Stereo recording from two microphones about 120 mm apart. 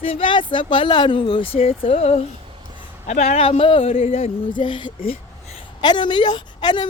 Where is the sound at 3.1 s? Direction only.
65° left (ahead or behind); by 5.1 s 45° left (ahead or behind).